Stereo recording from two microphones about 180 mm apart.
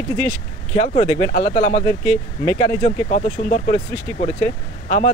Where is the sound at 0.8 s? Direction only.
35° left (ahead or behind).